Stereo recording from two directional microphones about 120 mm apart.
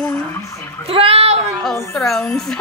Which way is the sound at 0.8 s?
55° right (ahead or behind).